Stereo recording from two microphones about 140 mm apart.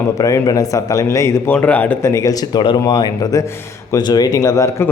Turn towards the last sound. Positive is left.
turn(degrees=20)  # may be behind; listen again after turning